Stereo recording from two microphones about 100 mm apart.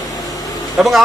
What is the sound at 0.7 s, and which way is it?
Speech, centre (ahead or behind).